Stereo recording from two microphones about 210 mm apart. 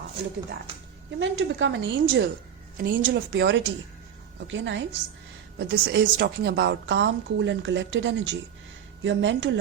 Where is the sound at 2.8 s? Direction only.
45° right (ahead or behind).